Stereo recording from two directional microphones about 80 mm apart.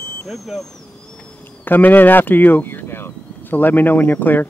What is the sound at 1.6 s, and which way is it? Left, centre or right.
Speech, left.